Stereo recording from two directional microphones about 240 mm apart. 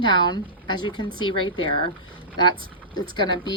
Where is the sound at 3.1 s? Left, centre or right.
Centre.